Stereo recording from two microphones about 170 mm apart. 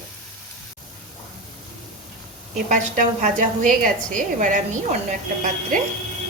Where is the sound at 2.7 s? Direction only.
45° right (ahead or behind).